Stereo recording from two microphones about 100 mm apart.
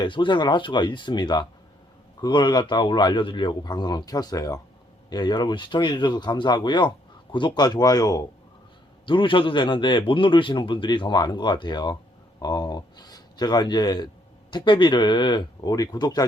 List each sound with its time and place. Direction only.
0.0 s a man's voice: 50° left (ahead or behind); by 4.6 s 35° left (ahead or behind)
5.0 s a man's voice: 45° left (ahead or behind)
9.0 s a man's voice: 55° left (ahead or behind)